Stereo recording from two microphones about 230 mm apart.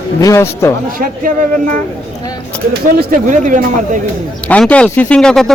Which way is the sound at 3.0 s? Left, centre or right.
Right.